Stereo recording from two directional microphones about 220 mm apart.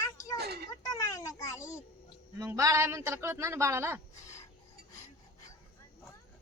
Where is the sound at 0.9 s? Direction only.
15° left (ahead or behind).